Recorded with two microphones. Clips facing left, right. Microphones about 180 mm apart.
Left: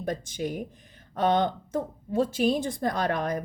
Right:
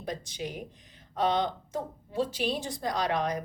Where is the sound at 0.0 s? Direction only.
50° left (ahead or behind).